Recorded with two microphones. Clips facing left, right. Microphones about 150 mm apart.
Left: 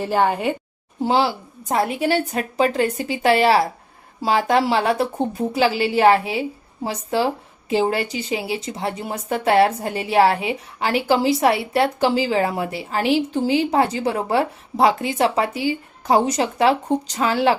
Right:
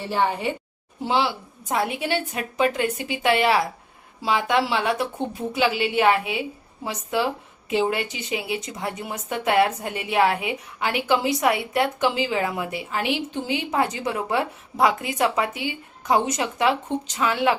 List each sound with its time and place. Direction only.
0.1 s a woman's voice: 45° left (ahead or behind)